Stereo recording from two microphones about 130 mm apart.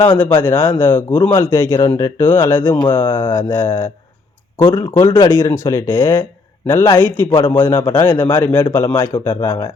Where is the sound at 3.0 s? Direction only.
35° left (ahead or behind).